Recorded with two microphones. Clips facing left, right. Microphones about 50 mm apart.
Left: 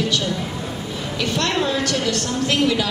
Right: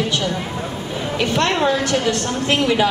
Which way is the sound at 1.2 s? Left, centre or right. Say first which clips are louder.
Right 3 dB; right.